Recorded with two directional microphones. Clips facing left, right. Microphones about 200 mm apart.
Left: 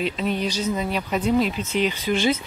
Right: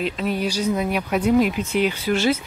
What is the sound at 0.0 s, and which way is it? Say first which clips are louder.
Speech: right 1 dB; 5° right (ahead or behind).